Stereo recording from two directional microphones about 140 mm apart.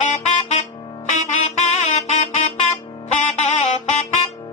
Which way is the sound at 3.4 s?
55° left (ahead or behind).